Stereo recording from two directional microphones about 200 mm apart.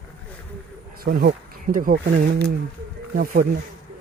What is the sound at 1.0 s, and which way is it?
Speech, 45° right (ahead or behind).